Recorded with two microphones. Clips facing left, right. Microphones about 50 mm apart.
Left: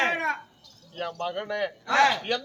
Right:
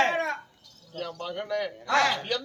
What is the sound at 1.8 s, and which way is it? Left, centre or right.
Speech, centre.